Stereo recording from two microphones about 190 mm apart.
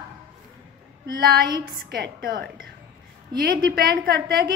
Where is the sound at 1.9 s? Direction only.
50° right (ahead or behind).